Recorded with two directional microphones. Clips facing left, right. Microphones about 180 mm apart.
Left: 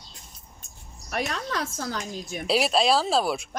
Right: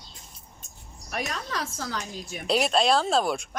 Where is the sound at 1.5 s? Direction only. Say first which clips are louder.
Left 2 dB; 50° left (ahead or behind).